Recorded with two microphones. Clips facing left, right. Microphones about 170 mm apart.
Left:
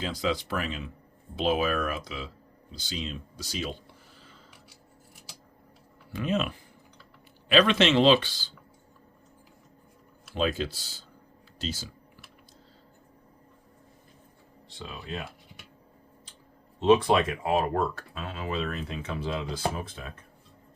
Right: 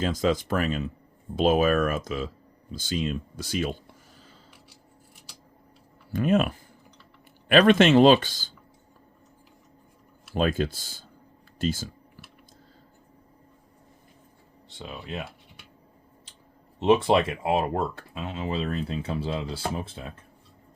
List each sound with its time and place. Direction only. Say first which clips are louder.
0.0 s speech: right 5 dB; 45° right (ahead or behind)
6.1 s speech: right 6 dB; 50° right (ahead or behind)
10.3 s speech: right 3 dB; 50° right (ahead or behind)
14.8 s speech: right 2 dB; 25° right (ahead or behind)
16.8 s speech: right 1 dB; 25° right (ahead or behind)